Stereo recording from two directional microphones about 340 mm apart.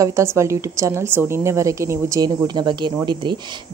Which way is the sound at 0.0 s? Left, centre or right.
Centre.